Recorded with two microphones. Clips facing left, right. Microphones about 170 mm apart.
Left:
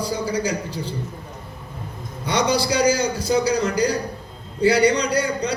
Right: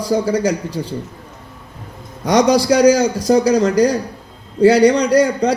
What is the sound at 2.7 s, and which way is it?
A man's voice, 65° right (ahead or behind).